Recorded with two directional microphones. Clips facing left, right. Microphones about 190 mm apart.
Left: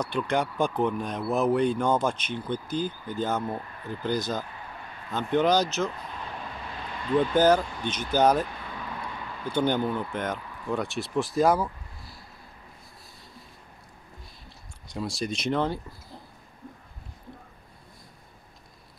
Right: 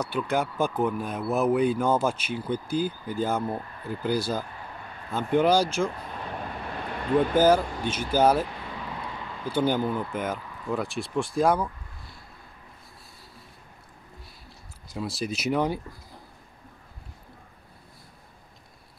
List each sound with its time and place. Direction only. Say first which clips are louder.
0.0 s speech: even; 5° right (ahead or behind)
6.7 s vehicle: right 1 dB; 55° right (ahead or behind)
7.3 s speech: even; 10° right (ahead or behind)
14.9 s speech: even; centre (ahead or behind)